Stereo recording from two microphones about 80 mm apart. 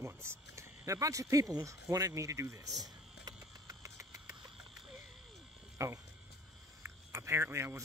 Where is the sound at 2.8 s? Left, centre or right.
Right.